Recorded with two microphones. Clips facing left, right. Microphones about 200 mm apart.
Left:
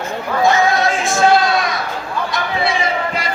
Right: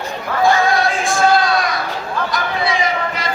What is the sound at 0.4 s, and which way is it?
Music, 20° left (ahead or behind).